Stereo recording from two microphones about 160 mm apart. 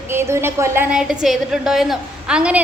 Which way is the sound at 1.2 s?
Centre (ahead or behind).